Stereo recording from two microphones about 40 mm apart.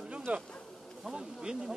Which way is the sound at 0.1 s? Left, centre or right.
Right.